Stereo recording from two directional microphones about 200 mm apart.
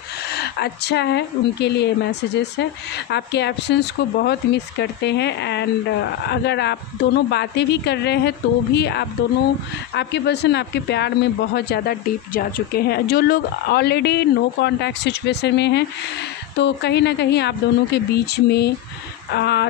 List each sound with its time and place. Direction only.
0.3 s speech: 55° left (ahead or behind)